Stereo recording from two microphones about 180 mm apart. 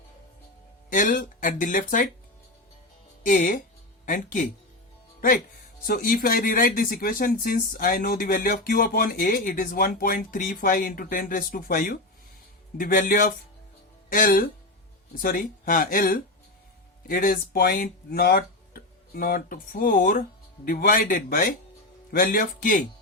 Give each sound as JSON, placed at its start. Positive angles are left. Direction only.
{"t": 0.9, "sound": "speech", "side_deg": 50}
{"t": 3.2, "sound": "speech", "side_deg": 50}
{"t": 5.8, "sound": "speech", "side_deg": 55}